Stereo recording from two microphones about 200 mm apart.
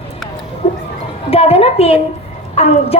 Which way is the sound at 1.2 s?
30° left (ahead or behind).